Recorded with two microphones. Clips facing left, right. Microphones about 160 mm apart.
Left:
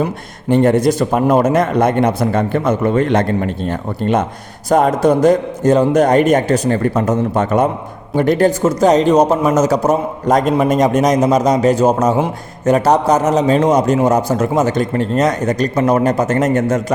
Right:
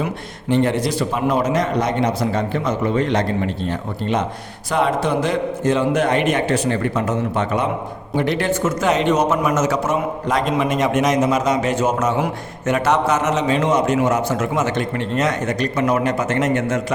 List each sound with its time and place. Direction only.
0.0 s a man's voice: 45° left (ahead or behind)